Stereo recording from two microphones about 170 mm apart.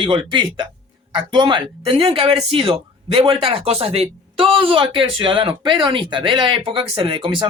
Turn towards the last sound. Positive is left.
turn(degrees=-30)  # may be behind; listen again after turning